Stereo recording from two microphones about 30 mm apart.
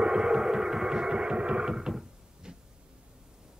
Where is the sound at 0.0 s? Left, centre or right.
Right.